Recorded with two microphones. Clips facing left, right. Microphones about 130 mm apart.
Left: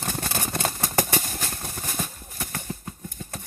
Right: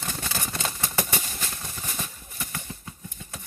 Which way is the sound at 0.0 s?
50° left (ahead or behind).